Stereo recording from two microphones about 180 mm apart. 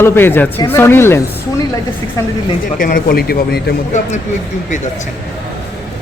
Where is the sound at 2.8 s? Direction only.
50° left (ahead or behind).